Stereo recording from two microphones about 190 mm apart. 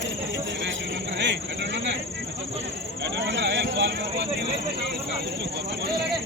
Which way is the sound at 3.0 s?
70° right (ahead or behind).